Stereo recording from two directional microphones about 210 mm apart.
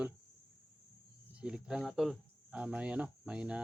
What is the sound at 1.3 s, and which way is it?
Speech, 5° right (ahead or behind).